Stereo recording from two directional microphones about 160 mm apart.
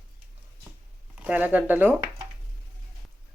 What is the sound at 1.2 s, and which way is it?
Speech, 10° right (ahead or behind).